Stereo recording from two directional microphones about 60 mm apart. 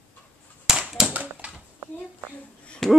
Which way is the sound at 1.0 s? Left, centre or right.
Right.